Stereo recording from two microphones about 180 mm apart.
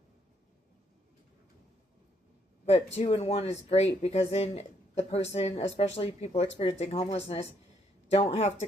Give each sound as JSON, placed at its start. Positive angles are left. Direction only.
{"t": 2.6, "sound": "speech", "side_deg": 35}